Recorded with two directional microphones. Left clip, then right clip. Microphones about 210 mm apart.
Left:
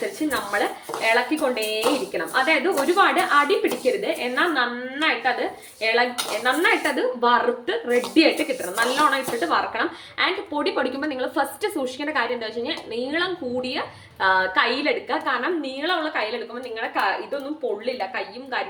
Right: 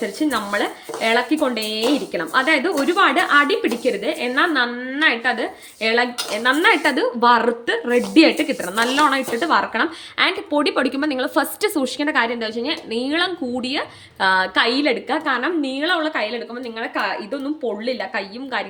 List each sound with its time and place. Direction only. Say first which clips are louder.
0.3 s speech: right 1 dB; 55° right (ahead or behind)
5.8 s speech: right 2 dB; 50° right (ahead or behind)
17.8 s a woman's voice: right 3 dB; 50° right (ahead or behind)